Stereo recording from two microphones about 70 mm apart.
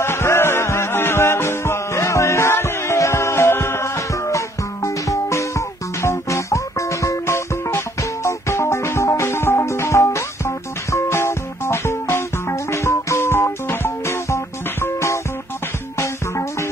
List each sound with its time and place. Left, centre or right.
0.0 s music: left